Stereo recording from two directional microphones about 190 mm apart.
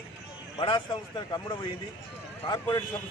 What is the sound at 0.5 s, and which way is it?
A man's voice, 25° left (ahead or behind).